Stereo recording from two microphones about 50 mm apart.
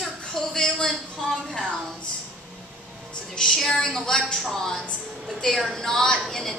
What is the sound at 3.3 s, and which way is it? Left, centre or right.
Speech, centre.